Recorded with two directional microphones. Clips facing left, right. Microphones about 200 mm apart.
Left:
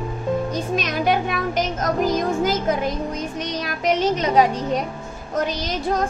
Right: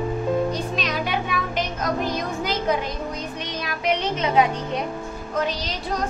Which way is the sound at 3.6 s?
45° left (ahead or behind).